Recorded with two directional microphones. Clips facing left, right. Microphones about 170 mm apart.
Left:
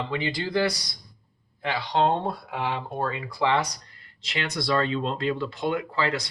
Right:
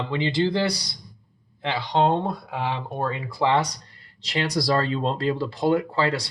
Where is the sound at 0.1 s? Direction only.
25° right (ahead or behind).